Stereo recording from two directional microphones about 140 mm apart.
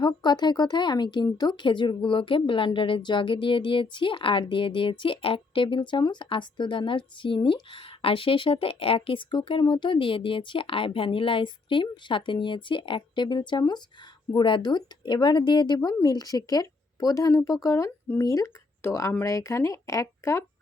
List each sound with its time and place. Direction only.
0.0 s speech: 30° left (ahead or behind)